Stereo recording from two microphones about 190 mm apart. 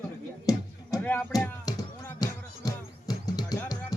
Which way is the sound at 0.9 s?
10° left (ahead or behind).